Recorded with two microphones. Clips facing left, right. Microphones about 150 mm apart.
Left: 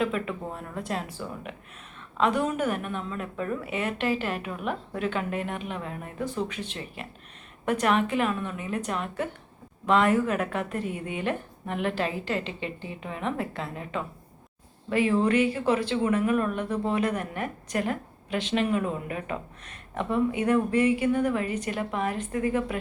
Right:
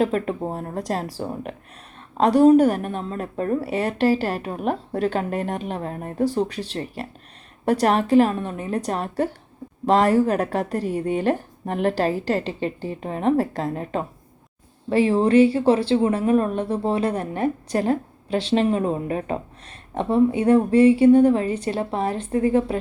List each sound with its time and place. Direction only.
0.0 s a woman's voice: 35° right (ahead or behind)